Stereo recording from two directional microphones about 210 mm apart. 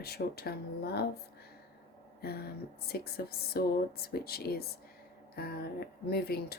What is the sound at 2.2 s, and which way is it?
Speech, 50° left (ahead or behind).